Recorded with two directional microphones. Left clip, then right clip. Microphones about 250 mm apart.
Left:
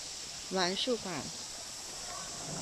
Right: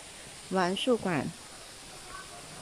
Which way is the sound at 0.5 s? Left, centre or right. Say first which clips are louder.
Right 4 dB; centre.